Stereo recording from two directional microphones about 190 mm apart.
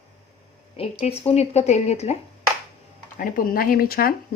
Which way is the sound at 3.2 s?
50° left (ahead or behind).